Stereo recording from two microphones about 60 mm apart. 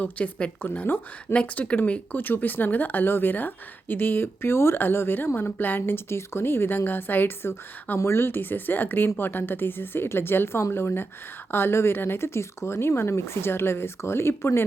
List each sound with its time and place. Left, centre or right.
0.0 s a woman's voice: left
1.3 s speech: centre; by 14.6 s left